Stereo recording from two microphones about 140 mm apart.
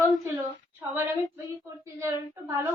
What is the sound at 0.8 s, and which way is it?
Female singing, 15° right (ahead or behind).